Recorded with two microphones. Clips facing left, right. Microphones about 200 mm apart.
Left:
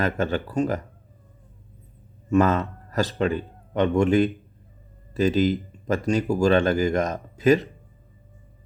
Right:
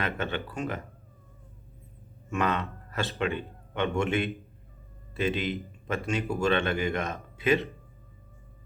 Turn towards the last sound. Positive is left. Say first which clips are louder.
# left 7 dB
turn(degrees=40)  # may be behind; listen again after turning